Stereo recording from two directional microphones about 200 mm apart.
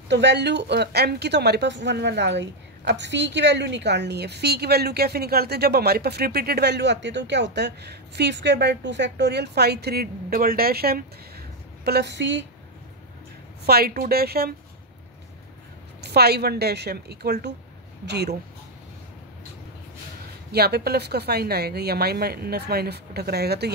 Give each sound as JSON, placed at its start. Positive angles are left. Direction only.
{"t": 0.1, "sound": "a woman's voice", "side_deg": -60}
{"t": 13.7, "sound": "speech", "side_deg": -50}
{"t": 16.0, "sound": "a woman's voice", "side_deg": -55}
{"t": 20.5, "sound": "speech", "side_deg": -55}